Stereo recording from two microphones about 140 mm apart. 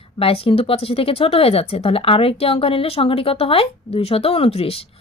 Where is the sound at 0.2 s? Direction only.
45° left (ahead or behind).